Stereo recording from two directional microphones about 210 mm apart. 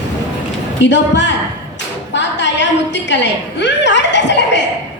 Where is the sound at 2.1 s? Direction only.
55° left (ahead or behind).